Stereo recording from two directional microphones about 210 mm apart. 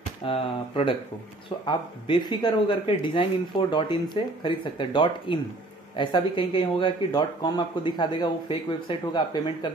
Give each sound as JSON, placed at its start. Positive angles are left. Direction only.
{"t": 0.2, "sound": "speech", "side_deg": 25}